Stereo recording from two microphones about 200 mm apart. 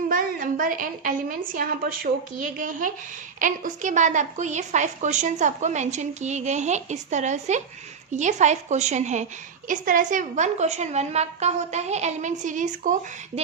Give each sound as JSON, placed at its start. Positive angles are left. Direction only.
{"t": 0.1, "sound": "a woman's voice", "side_deg": -45}